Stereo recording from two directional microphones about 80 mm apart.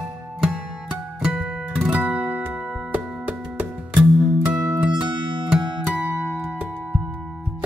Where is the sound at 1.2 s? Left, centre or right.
Centre.